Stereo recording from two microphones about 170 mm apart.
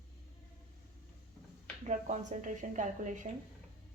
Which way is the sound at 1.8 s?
45° right (ahead or behind).